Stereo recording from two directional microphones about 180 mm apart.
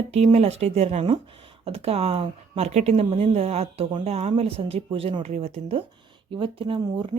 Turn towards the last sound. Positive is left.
turn(degrees=-25)  # may be behind; listen again after turning